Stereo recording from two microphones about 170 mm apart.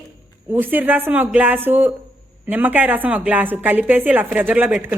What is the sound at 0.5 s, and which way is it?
Speech, 10° right (ahead or behind).